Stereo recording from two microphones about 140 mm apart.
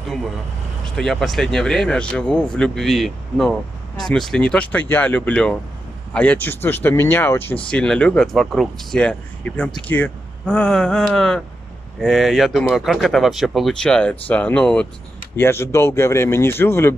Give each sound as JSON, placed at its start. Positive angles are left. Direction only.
{"t": 0.8, "sound": "speech", "side_deg": 5}